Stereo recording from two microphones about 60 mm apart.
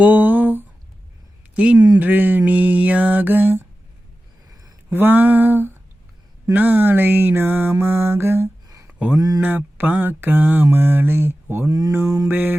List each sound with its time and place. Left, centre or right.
0.0 s a sound: right
1.5 s speech: centre
2.0 s mantra: right
4.9 s mantra: right
8.9 s a sound: right
9.1 s speech: right
9.4 s mantra: right
11.7 s mantra: right
12.0 s mantra: right
12.3 s mantra: right